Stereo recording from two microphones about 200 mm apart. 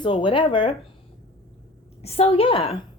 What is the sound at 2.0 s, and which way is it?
Speech, 30° left (ahead or behind).